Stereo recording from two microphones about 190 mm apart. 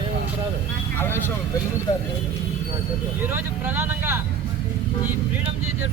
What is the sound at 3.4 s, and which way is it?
Speech, 10° right (ahead or behind).